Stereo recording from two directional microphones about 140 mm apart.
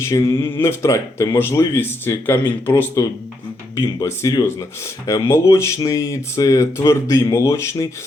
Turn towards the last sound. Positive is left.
turn(degrees=20)  # may be behind; listen again after turning